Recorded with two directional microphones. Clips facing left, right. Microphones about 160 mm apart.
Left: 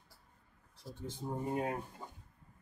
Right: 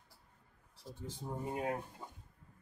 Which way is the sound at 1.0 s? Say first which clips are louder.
Left 3 dB; 5° right (ahead or behind).